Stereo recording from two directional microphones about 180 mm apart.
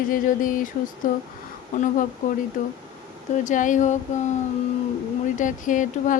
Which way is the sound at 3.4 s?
45° left (ahead or behind).